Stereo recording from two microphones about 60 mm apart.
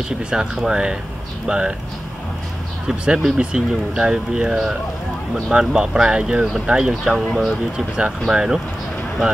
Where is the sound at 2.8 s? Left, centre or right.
Centre.